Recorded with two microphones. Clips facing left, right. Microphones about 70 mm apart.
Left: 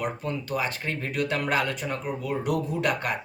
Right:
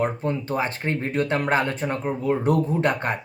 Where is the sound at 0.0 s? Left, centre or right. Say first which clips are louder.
Right 6 dB; right.